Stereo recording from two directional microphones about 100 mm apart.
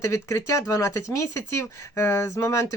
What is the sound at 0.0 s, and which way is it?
Speech, 30° left (ahead or behind).